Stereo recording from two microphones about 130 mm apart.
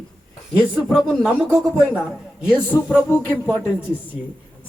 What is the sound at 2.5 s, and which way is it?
Speech, 15° left (ahead or behind).